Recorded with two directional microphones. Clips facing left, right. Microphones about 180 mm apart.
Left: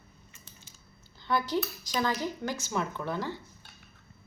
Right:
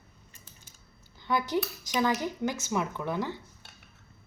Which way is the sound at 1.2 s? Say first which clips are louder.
Right 1 dB; 15° right (ahead or behind).